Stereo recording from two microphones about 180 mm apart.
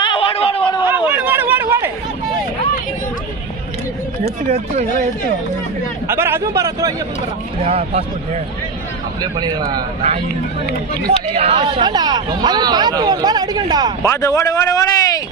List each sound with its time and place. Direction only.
0.0 s a sound: 30° left (ahead or behind)
0.8 s chatter: 10° right (ahead or behind)
4.4 s speech: 35° right (ahead or behind)
6.1 s speech: 15° right (ahead or behind)
7.6 s speech: 35° right (ahead or behind)
9.2 s speech: 20° right (ahead or behind)
11.3 s speech: 30° right (ahead or behind)
14.0 s speech: 15° left (ahead or behind)